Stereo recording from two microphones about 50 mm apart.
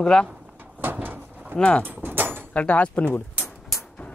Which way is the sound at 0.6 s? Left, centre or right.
Right.